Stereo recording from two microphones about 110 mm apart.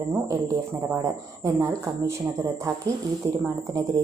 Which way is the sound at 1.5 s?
25° right (ahead or behind).